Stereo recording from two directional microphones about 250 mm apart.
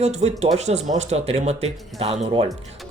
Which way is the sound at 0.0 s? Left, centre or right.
Right.